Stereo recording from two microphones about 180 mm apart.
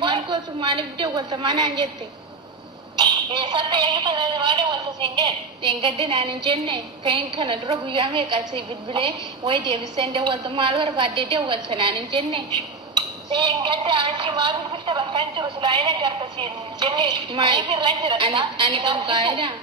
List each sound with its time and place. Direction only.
0.0 s a woman's voice: 25° right (ahead or behind)
3.0 s a woman's voice: 25° right (ahead or behind)